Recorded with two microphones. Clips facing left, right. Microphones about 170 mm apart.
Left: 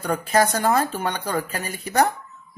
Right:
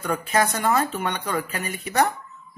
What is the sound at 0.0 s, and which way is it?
Speech, 35° left (ahead or behind).